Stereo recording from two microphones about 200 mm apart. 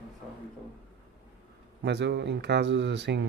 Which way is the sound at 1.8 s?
60° right (ahead or behind).